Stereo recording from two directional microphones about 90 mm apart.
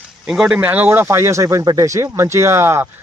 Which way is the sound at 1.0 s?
30° right (ahead or behind).